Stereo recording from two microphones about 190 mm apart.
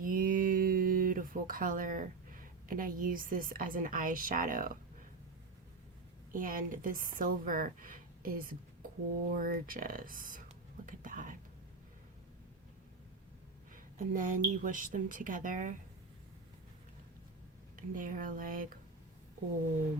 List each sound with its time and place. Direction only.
0.0 s a sound: 45° right (ahead or behind)
6.3 s a woman's voice: 45° right (ahead or behind)
10.8 s whispering: 45° right (ahead or behind)
13.7 s a woman's voice: 45° right (ahead or behind)
17.7 s a woman's voice: 45° right (ahead or behind)